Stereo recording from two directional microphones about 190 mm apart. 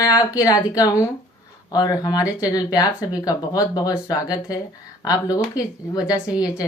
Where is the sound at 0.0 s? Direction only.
20° left (ahead or behind).